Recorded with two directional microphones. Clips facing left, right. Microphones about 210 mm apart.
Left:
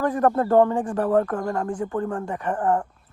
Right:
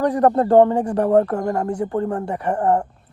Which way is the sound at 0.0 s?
15° right (ahead or behind).